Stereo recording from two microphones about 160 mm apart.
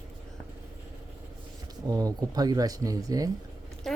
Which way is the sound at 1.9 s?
25° right (ahead or behind).